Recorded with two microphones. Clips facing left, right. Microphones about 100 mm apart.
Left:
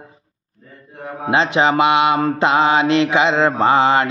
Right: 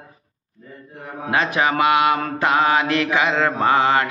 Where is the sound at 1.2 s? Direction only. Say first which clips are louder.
Left 4 dB; 25° left (ahead or behind).